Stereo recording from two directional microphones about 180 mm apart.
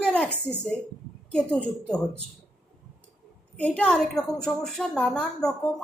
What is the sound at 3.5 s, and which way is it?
A woman's voice, 5° left (ahead or behind).